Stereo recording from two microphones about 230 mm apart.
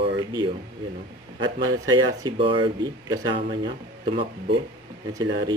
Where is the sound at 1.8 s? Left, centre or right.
Centre.